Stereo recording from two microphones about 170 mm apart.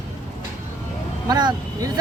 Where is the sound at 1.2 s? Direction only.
25° right (ahead or behind).